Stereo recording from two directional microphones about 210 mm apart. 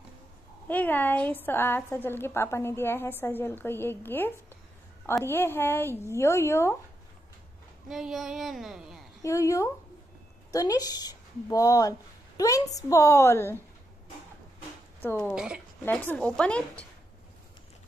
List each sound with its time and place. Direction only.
0.7 s a woman's voice: 10° left (ahead or behind)
7.9 s speech: centre (ahead or behind)
9.2 s a woman's voice: 15° left (ahead or behind)
15.0 s speech: 10° left (ahead or behind)
15.3 s speech: 5° right (ahead or behind)
15.8 s speech: 10° left (ahead or behind)